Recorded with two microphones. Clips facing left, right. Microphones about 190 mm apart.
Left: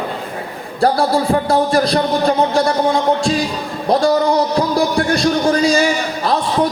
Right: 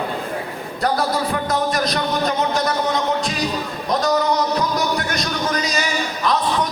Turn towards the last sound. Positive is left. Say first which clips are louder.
# left 3 dB
turn(degrees=30)  # may be behind; listen again after turning